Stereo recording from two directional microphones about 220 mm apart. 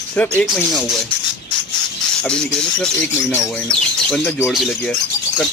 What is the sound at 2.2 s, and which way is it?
Speech, 5° left (ahead or behind).